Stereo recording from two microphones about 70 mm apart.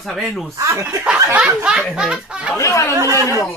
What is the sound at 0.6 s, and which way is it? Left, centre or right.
Speech, right.